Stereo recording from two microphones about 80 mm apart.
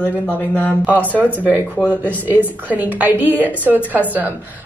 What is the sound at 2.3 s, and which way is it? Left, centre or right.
Speech, left.